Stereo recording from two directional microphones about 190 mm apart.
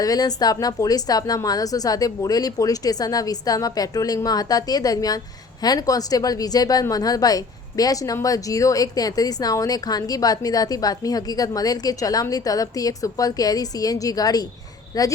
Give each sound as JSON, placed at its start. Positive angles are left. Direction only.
{"t": 0.0, "sound": "a woman's voice", "side_deg": 20}